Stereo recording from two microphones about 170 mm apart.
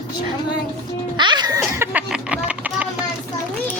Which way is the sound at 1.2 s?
25° right (ahead or behind).